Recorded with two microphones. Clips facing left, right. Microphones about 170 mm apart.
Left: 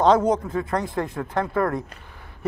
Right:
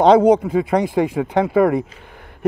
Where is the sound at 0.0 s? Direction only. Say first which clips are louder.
Right 7 dB; 65° right (ahead or behind).